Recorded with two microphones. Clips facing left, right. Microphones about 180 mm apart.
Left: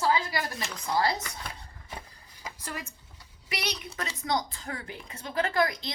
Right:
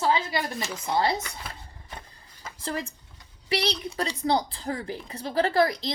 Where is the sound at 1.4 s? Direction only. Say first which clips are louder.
Right 1 dB; 5° right (ahead or behind).